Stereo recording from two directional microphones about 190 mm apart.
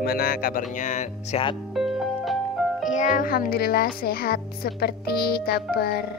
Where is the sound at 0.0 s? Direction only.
50° left (ahead or behind).